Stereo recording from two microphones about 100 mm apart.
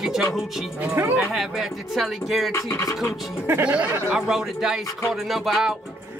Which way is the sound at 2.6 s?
30° left (ahead or behind).